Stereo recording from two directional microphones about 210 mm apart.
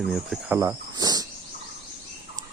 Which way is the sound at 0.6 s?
15° right (ahead or behind).